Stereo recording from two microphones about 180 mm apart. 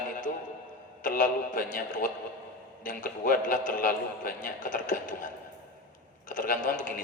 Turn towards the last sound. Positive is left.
turn(degrees=50)  # may be behind; listen again after turning